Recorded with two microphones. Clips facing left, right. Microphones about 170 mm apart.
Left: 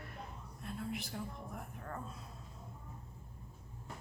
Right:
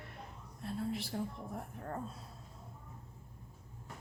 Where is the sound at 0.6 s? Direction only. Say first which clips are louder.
Right 4 dB; 35° right (ahead or behind).